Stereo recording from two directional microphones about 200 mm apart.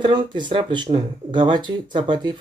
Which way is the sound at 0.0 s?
25° right (ahead or behind).